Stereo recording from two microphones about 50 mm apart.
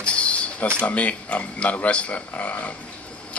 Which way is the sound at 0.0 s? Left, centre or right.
Left.